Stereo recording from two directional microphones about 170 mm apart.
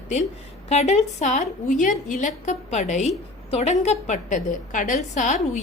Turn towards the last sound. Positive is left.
turn(degrees=45)  # may be behind; listen again after turning